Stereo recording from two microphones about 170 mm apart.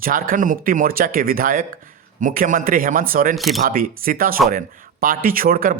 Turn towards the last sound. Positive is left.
turn(degrees=-55)  # may be behind; listen again after turning